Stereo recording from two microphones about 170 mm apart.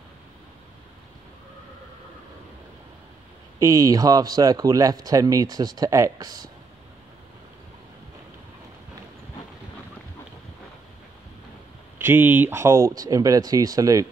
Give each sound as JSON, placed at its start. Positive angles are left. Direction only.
{"t": 3.5, "sound": "speech", "side_deg": -20}
{"t": 12.0, "sound": "speech", "side_deg": -10}